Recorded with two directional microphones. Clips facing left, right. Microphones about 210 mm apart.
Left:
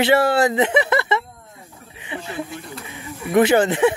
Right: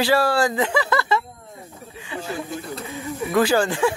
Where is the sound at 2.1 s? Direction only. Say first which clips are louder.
Left 1 dB; 25° left (ahead or behind).